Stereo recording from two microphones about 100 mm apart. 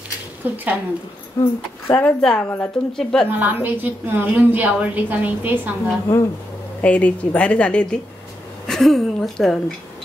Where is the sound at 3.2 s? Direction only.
20° right (ahead or behind).